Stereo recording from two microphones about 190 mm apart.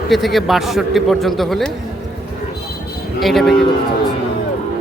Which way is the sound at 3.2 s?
Centre (ahead or behind).